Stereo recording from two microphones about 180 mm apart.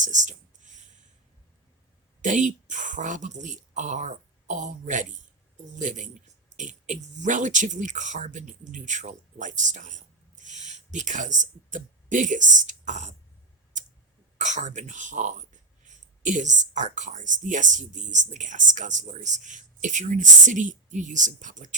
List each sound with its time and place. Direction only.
0.0 s a sound: 45° right (ahead or behind)
2.2 s speech: 45° right (ahead or behind)
14.3 s speech: 40° right (ahead or behind)